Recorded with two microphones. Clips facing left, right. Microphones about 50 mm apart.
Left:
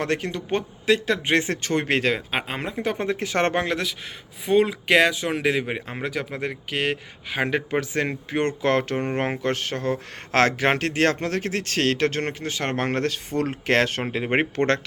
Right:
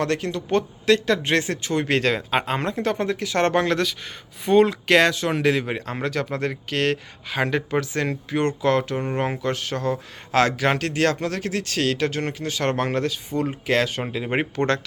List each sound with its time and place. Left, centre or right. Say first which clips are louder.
0.0 s a man's voice: right 2 dB; left
0.5 s speech: right 3 dB; centre
1.6 s speech: even; left
1.9 s speech: right 4 dB; centre; by 3.5 s left
3.5 s speech: right 3 dB; centre; by 14.8 s left